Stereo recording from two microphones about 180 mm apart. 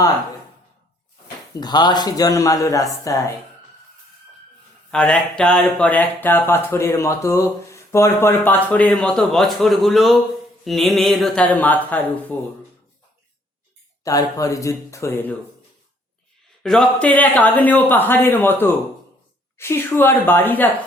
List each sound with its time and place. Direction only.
1.5 s speech: 25° left (ahead or behind)
4.9 s speech: 5° left (ahead or behind)
14.0 s speech: 20° left (ahead or behind)
16.6 s speech: 5° left (ahead or behind)